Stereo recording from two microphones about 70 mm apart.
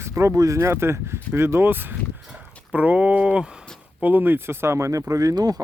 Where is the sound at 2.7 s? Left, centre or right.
Centre; by 5.6 s right.